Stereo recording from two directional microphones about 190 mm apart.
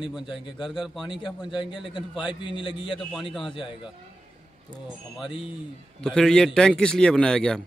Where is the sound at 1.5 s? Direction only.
25° left (ahead or behind).